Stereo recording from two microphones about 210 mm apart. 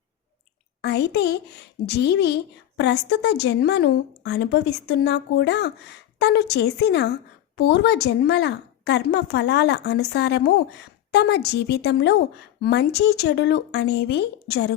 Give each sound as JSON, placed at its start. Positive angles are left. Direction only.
{"t": 0.8, "sound": "a woman's voice", "side_deg": 55}